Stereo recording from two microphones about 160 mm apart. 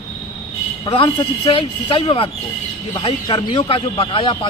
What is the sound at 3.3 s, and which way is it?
Speech, 25° left (ahead or behind).